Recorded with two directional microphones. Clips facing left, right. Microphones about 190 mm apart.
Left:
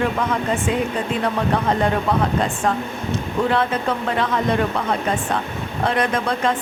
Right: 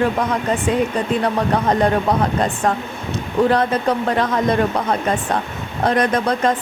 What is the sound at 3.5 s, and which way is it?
Speech, 40° right (ahead or behind).